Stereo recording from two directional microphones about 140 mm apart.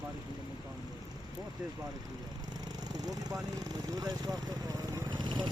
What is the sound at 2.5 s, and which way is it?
Vehicle, 30° right (ahead or behind).